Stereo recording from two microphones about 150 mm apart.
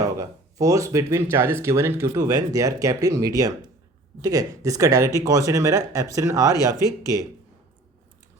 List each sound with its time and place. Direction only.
0.2 s speech: 20° right (ahead or behind)